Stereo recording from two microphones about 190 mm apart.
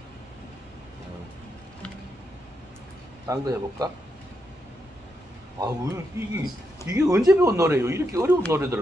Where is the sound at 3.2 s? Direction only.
20° right (ahead or behind).